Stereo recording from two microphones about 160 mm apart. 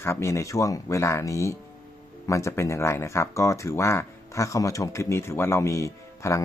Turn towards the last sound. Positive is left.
turn(degrees=20)  # may be behind; listen again after turning